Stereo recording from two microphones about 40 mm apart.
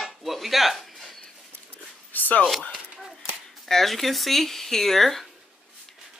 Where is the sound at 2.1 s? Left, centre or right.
Left.